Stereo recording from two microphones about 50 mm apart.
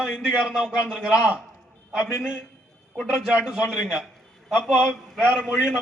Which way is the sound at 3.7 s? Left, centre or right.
Right.